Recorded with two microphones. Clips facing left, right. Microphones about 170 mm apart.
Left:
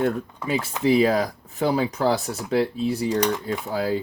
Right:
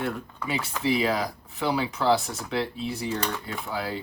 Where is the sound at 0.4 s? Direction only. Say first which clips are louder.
Left 5 dB; 45° left (ahead or behind).